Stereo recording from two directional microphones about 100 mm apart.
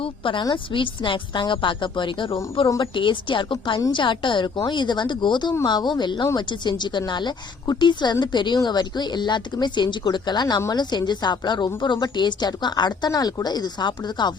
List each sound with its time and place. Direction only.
0.0 s a woman's voice: 60° left (ahead or behind)